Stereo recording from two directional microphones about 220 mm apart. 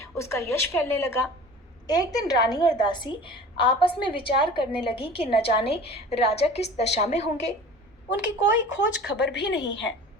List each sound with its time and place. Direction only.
0.0 s a woman's voice: 15° left (ahead or behind); by 7.4 s 30° left (ahead or behind)
9.0 s a woman's voice: 50° left (ahead or behind)